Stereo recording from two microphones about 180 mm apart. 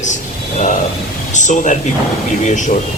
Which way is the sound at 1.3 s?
45° left (ahead or behind).